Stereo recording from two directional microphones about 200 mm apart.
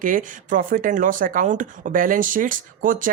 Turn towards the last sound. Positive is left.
turn(degrees=-40)  # may be behind; listen again after turning